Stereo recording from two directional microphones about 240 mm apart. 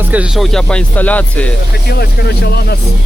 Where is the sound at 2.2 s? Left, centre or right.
Left.